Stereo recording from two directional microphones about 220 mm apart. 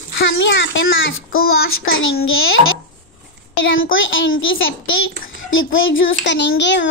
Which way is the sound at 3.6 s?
60° left (ahead or behind).